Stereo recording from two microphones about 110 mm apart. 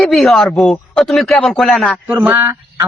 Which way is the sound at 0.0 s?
Centre (ahead or behind).